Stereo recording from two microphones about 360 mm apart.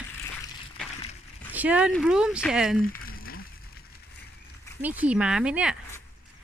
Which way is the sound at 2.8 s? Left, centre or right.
Left.